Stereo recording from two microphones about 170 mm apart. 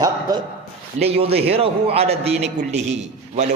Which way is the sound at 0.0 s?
20° right (ahead or behind).